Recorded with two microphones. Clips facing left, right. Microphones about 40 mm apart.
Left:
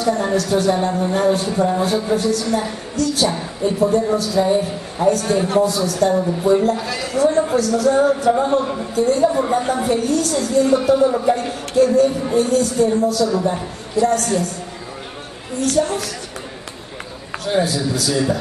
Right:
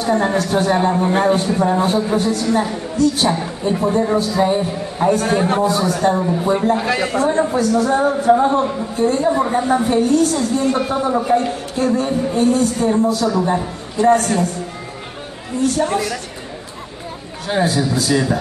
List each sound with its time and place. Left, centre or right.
0.0 s a man's voice: right
15.8 s a man's voice: right
17.5 s a man's voice: right